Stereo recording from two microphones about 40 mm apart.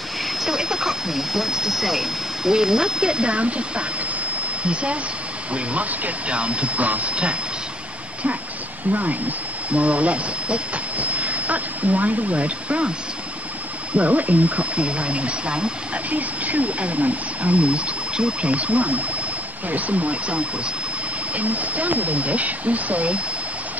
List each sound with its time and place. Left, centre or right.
0.4 s speech: centre; by 3.8 s right
5.5 s speech: right
9.7 s speech: right
13.9 s speech: right
16.1 s speech: right